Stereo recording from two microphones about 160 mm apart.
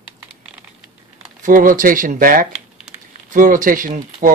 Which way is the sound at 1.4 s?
60° right (ahead or behind).